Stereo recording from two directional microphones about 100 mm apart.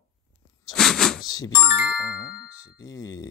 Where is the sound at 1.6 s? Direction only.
20° right (ahead or behind).